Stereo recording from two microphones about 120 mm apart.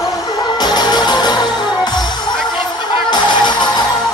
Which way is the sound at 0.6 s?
35° left (ahead or behind).